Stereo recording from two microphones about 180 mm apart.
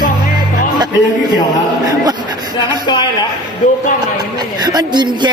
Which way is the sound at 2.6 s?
25° left (ahead or behind).